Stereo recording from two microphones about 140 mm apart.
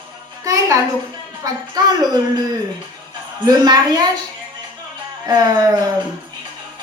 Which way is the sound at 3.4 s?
30° right (ahead or behind).